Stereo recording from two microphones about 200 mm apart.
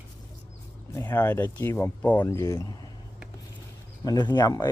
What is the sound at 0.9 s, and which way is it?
Speech, 10° left (ahead or behind).